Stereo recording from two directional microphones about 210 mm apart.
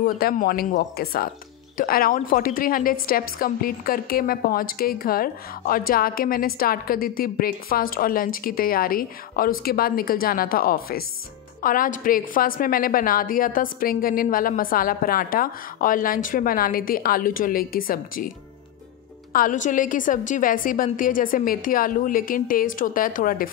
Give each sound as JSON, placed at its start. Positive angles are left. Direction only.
{"t": 0.0, "sound": "a woman's voice", "side_deg": 45}
{"t": 19.3, "sound": "a woman's voice", "side_deg": 40}